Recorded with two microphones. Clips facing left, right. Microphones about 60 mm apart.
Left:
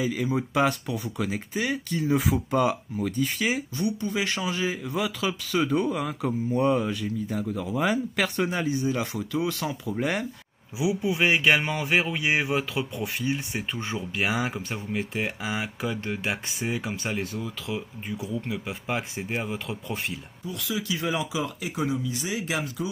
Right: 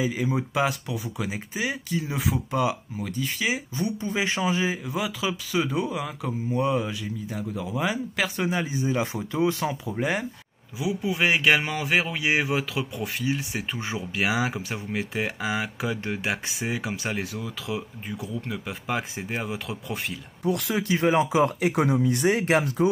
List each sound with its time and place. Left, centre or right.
0.0 s speech: centre
0.3 s speech: centre
3.7 s speech: right
4.8 s speech: centre
8.6 s speech: right
9.9 s speech: centre
10.8 s speech: centre
20.4 s speech: right